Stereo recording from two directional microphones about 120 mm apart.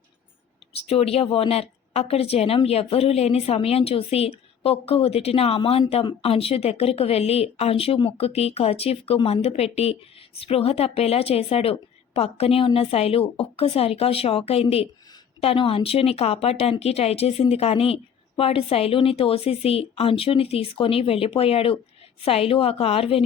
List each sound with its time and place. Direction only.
0.9 s a woman's voice: 55° left (ahead or behind)